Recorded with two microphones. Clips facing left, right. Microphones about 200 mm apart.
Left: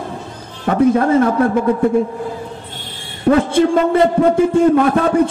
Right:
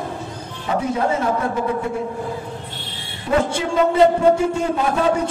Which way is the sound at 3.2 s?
55° left (ahead or behind).